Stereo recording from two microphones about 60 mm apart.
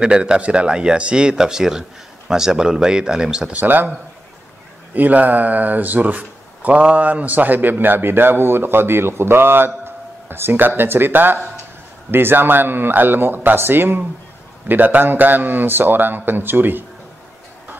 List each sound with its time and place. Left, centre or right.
0.0 s speech: centre
3.5 s speech: right
4.9 s speech: right